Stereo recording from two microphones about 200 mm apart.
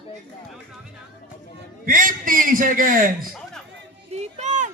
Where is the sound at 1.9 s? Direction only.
45° right (ahead or behind).